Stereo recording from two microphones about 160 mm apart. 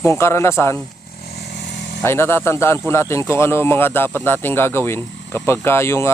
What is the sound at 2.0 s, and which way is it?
Speech, 15° left (ahead or behind).